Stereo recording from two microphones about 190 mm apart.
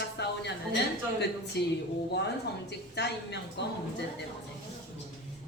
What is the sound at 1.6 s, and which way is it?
Speech, 60° left (ahead or behind).